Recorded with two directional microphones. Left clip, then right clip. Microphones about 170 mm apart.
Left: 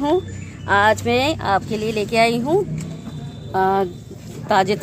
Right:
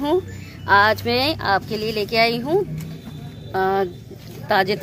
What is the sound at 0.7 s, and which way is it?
Speech, centre (ahead or behind).